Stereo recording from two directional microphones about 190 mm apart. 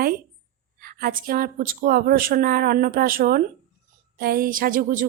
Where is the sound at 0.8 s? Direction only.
50° right (ahead or behind).